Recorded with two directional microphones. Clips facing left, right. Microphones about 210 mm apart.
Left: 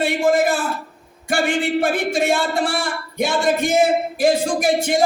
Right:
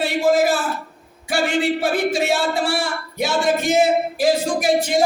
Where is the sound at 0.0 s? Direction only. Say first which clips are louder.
Even; 55° left (ahead or behind).